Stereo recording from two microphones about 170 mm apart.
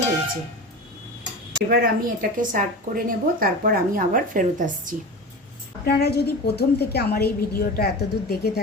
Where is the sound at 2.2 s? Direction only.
60° right (ahead or behind).